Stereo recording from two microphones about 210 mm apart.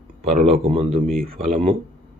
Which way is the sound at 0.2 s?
30° right (ahead or behind).